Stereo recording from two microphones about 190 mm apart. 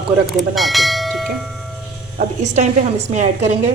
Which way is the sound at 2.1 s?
40° right (ahead or behind).